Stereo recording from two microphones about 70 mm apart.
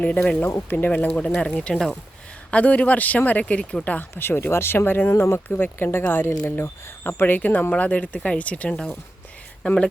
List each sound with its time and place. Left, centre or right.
0.0 s speech: centre
4.3 s speech: left; by 9.9 s centre